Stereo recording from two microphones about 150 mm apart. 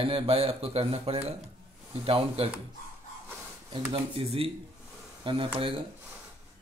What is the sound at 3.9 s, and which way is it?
Speech, 40° right (ahead or behind).